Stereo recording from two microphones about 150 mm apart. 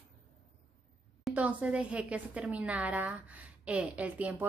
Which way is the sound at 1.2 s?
10° right (ahead or behind).